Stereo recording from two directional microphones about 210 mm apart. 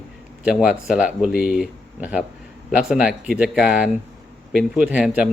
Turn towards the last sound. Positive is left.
turn(degrees=-5)  # may be behind; listen again after turning